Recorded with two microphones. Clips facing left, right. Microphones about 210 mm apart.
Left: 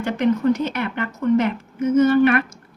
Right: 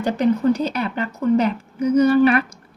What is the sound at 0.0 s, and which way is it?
A woman's voice, 35° right (ahead or behind).